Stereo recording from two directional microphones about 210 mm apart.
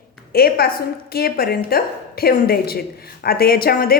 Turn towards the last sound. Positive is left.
turn(degrees=45)  # may be behind; listen again after turning